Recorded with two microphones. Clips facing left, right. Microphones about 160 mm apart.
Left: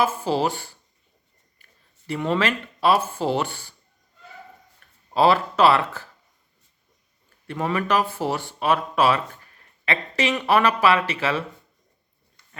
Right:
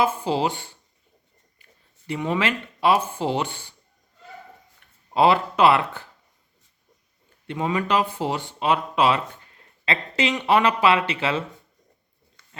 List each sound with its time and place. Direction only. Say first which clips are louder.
0.0 s speech: even; 15° right (ahead or behind)
2.0 s speech: left 1 dB; 15° right (ahead or behind)
4.8 s a sound: left 1 dB; 20° right (ahead or behind)
5.1 s speech: even; 20° right (ahead or behind)
7.4 s speech: even; 15° right (ahead or behind)